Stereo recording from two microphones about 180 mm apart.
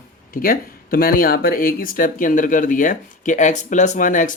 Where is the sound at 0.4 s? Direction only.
55° left (ahead or behind).